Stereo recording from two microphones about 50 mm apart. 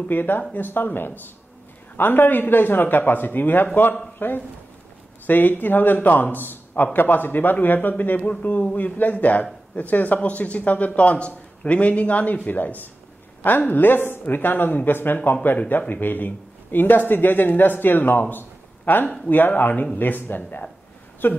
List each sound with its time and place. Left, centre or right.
0.1 s a man's voice: left